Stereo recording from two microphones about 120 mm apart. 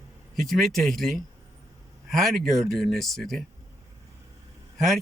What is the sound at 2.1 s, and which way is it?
Speech, 5° left (ahead or behind).